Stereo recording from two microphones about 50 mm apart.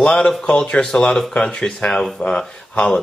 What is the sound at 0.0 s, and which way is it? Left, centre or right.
Speech, centre.